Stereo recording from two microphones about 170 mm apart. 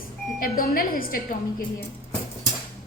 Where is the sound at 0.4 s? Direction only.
60° left (ahead or behind).